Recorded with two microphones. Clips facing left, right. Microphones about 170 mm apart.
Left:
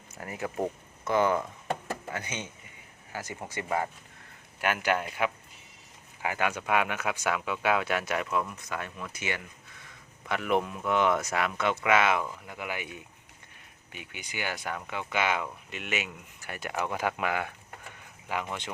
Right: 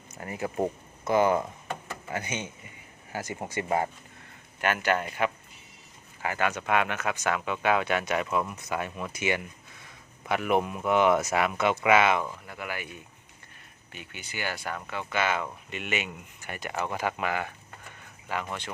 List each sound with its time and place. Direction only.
0.2 s speech: centre (ahead or behind)
4.6 s speech: 10° left (ahead or behind)
12.5 s speech: 15° left (ahead or behind)
13.9 s speech: 10° left (ahead or behind)
15.7 s speech: centre (ahead or behind)